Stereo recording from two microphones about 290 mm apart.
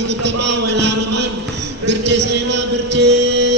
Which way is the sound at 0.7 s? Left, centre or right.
Right.